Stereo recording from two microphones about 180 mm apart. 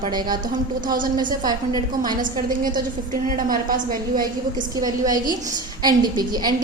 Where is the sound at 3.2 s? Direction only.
50° right (ahead or behind).